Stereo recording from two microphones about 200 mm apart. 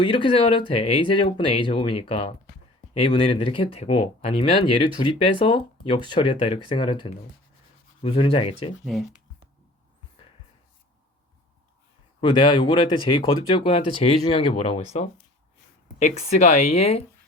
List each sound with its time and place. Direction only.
0.0 s speech: 25° left (ahead or behind)
8.8 s speech: centre (ahead or behind)
12.2 s speech: 25° left (ahead or behind)